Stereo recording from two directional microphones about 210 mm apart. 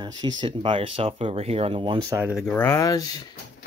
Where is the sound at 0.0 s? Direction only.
20° right (ahead or behind).